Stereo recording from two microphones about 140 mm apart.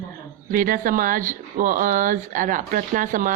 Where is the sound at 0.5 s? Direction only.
80° right.